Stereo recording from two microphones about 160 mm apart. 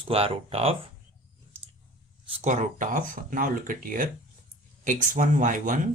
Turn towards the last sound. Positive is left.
turn(degrees=-55)  # may be behind; listen again after turning